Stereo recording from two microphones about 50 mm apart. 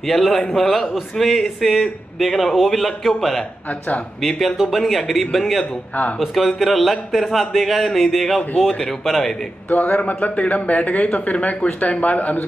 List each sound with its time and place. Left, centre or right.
0.0 s a man's voice: centre
9.7 s speech: left